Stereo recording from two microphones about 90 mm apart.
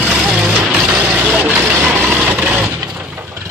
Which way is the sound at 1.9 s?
20° right (ahead or behind).